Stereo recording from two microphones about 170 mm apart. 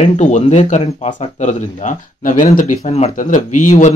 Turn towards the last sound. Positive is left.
turn(degrees=45)  # may be behind; listen again after turning